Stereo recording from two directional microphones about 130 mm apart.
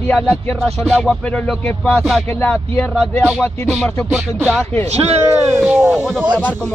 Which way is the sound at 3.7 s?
Centre (ahead or behind).